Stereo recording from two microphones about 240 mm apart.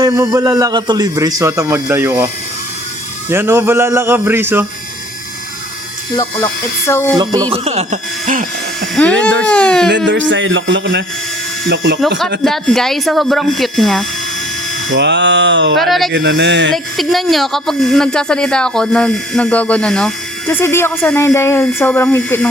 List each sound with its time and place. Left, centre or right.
0.0 s a man's voice: centre
6.1 s speech: centre
7.2 s a man's voice: centre
9.0 s speech: centre
10.1 s speech: right
11.9 s speech: centre
14.8 s speech: right
15.8 s speech: centre
16.1 s speech: right
16.7 s speech: centre